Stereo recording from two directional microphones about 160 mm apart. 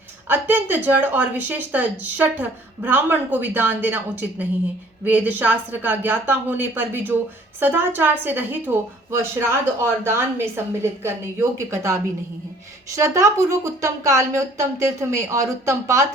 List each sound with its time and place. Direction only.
0.3 s a woman's voice: 10° right (ahead or behind)